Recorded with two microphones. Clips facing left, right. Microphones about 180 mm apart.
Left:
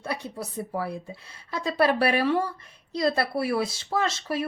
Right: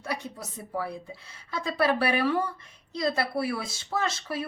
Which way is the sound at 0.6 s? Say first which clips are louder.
Left 1 dB; 30° left (ahead or behind).